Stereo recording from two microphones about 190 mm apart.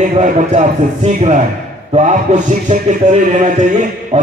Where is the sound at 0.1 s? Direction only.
35° right (ahead or behind).